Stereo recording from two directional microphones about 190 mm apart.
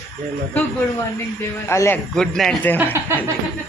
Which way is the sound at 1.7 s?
15° left (ahead or behind).